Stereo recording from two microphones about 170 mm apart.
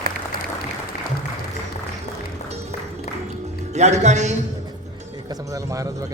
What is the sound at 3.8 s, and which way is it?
Speech, 40° right (ahead or behind).